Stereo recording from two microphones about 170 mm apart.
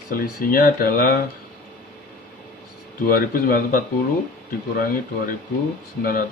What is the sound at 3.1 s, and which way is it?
Speech, 55° left (ahead or behind).